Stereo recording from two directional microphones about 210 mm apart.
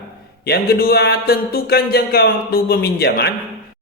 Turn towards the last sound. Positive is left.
turn(degrees=50)  # may be behind; listen again after turning